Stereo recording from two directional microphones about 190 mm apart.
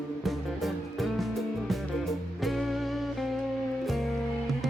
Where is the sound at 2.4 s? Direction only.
Centre (ahead or behind).